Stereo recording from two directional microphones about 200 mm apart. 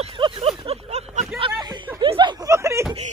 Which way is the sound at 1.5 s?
20° right (ahead or behind).